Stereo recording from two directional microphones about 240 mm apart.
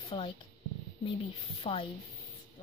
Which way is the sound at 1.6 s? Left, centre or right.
Left.